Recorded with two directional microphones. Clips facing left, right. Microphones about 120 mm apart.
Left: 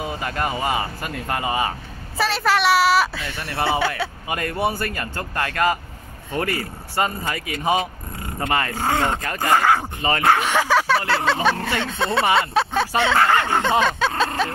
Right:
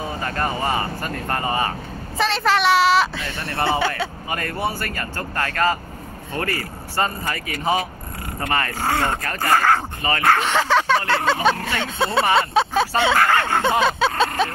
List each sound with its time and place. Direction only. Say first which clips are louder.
0.0 s speech: even; 10° left (ahead or behind)
4.3 s speech: left 3 dB; 20° left (ahead or behind); by 13.1 s 5° right (ahead or behind)
13.1 s a sound: even; 20° left (ahead or behind)
13.6 s vehicle: right 1 dB; 10° right (ahead or behind)